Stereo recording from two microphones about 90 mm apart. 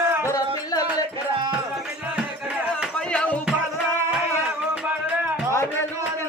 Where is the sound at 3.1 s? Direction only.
10° left (ahead or behind).